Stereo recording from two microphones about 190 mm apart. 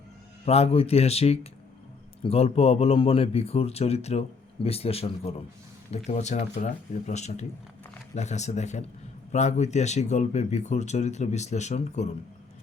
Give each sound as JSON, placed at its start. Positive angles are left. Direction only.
{"t": 0.4, "sound": "speech", "side_deg": 35}